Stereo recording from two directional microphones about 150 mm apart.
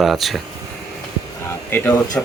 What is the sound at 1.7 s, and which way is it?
Speech, 15° left (ahead or behind).